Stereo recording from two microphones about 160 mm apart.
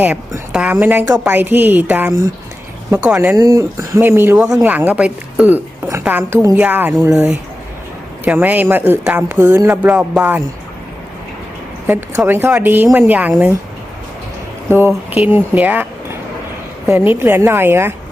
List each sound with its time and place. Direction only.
0.0 s a woman's voice: 10° right (ahead or behind)
11.9 s a woman's voice: 15° right (ahead or behind)
14.7 s a woman's voice: 15° right (ahead or behind)